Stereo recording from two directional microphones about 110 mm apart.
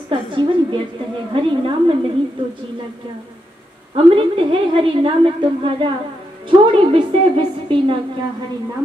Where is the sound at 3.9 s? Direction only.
55° right (ahead or behind).